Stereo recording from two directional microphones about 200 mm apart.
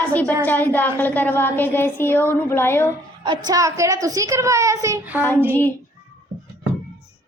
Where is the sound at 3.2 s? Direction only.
20° right (ahead or behind).